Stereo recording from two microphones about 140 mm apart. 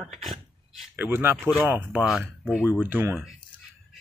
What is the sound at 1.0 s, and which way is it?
Speech, 15° right (ahead or behind).